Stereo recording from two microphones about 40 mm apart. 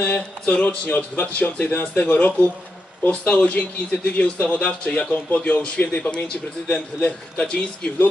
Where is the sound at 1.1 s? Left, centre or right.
Left.